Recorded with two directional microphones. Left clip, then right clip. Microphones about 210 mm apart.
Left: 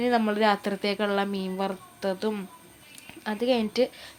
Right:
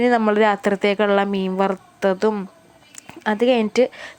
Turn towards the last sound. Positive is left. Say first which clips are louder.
# right 8 dB
turn(degrees=-30)  # may be behind; listen again after turning